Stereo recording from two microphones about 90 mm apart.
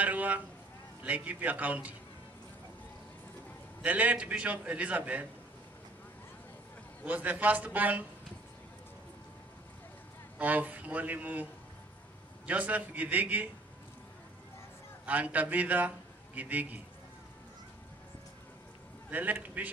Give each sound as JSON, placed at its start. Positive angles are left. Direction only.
{"t": 0.0, "sound": "a sound", "side_deg": -20}
{"t": 1.0, "sound": "a man's voice", "side_deg": -15}
{"t": 3.8, "sound": "a man's voice", "side_deg": -15}
{"t": 7.1, "sound": "a man's voice", "side_deg": -15}
{"t": 10.4, "sound": "a man's voice", "side_deg": -20}
{"t": 12.4, "sound": "a man's voice", "side_deg": -15}
{"t": 15.0, "sound": "a man's voice", "side_deg": -15}
{"t": 19.0, "sound": "a man's voice", "side_deg": -20}